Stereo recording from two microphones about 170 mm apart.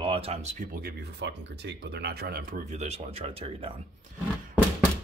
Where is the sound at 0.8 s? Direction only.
75° right (ahead or behind); by 3.8 s 35° right (ahead or behind).